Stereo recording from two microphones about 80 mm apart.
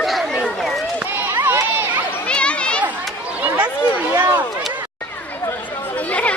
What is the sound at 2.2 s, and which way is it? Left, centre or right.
Children playing, centre.